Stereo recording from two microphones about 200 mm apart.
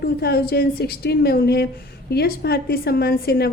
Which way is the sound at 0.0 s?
50° left (ahead or behind).